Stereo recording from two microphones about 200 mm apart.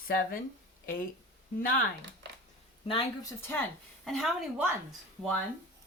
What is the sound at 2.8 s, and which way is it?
Speech, 20° left (ahead or behind).